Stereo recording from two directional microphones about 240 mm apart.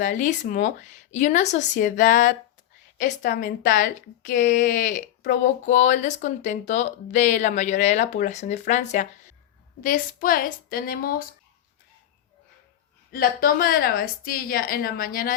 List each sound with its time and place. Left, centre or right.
0.0 s a woman's voice: left
13.1 s a woman's voice: left